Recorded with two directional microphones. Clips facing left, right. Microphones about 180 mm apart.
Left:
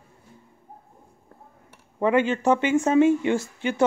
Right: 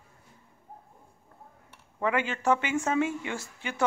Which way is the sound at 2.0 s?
20° left (ahead or behind).